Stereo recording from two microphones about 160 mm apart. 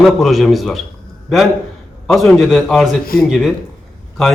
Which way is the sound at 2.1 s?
Centre (ahead or behind).